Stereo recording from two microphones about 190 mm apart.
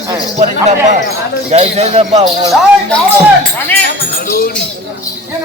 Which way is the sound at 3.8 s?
55° left (ahead or behind).